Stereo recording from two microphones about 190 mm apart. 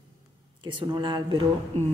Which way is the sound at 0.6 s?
25° right (ahead or behind).